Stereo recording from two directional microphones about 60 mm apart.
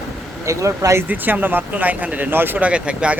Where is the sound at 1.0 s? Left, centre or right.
Right.